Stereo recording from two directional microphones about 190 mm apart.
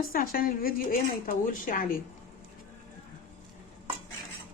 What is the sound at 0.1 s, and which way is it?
A woman's voice, 50° left (ahead or behind).